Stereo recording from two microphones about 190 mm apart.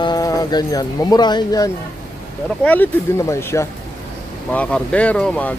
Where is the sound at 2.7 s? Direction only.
10° left (ahead or behind).